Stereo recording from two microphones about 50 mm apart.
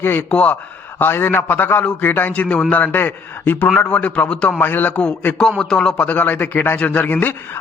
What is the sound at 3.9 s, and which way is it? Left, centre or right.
Speech, left.